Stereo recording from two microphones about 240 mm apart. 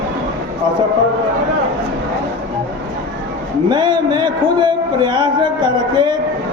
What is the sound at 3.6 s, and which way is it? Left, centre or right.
A man's voice, centre.